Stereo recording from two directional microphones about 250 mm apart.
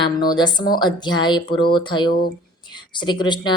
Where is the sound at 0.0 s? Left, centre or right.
Centre.